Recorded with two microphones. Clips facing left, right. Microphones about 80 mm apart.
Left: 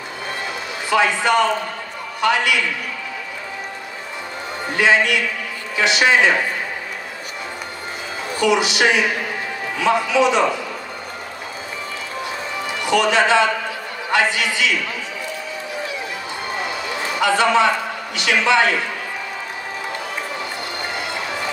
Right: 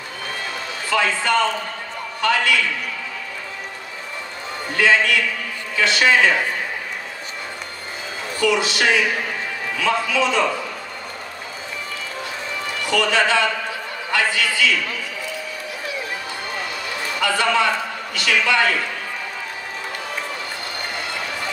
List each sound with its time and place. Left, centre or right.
0.8 s a man's voice: centre
4.7 s a man's voice: centre
8.4 s a man's voice: centre
12.8 s a man's voice: left
16.5 s run: left
18.1 s a man's voice: left